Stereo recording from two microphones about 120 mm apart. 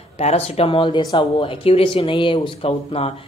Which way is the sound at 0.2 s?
60° left (ahead or behind).